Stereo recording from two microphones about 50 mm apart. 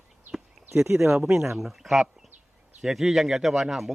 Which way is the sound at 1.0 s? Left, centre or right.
Centre.